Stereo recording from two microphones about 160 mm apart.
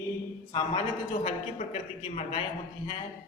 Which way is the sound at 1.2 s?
45° left (ahead or behind).